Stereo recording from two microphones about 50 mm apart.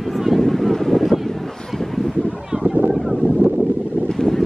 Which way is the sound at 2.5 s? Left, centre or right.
Centre.